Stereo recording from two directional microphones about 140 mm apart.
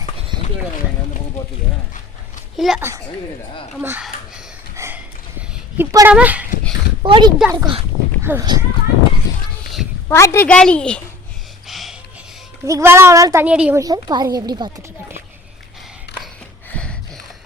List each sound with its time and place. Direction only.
2.6 s a child's voice: 5° right (ahead or behind)
4.7 s a sound: 20° right (ahead or behind)
5.7 s a woman's voice: 20° right (ahead or behind)
7.0 s speech: 35° right (ahead or behind)
8.2 s speech: 15° right (ahead or behind)
10.1 s a woman's voice: 20° left (ahead or behind)
11.7 s a sound: centre (ahead or behind)
12.6 s speech: 20° right (ahead or behind)
13.4 s a woman's voice: 10° right (ahead or behind)
13.7 s speech: 25° right (ahead or behind)
16.6 s a sound: 10° left (ahead or behind)